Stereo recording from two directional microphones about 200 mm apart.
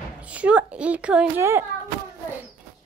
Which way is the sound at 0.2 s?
5° right (ahead or behind).